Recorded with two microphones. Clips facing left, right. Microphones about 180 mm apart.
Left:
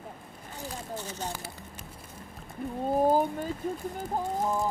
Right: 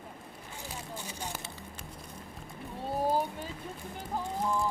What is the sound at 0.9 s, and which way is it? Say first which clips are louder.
Speech: left 4 dB; 10° right (ahead or behind).